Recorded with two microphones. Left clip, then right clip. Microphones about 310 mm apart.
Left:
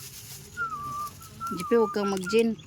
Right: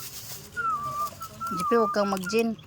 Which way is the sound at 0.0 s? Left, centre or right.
Centre.